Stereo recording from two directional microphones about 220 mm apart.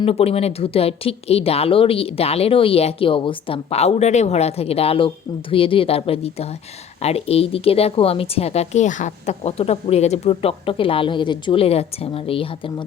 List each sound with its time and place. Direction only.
0.0 s speech: 25° left (ahead or behind)